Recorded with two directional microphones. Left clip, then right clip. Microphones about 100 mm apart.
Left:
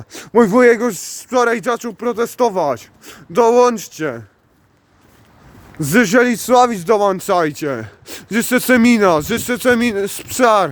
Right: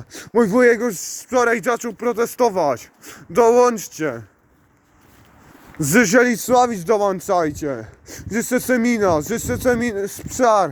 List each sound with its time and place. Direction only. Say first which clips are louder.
0.1 s speech: left 5 dB; 30° left (ahead or behind)
5.7 s speech: left 2 dB; 45° left (ahead or behind)